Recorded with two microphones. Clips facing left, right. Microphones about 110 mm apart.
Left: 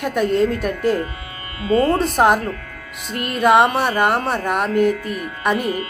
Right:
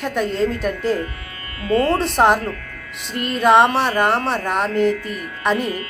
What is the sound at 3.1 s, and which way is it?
Speech, 50° left (ahead or behind).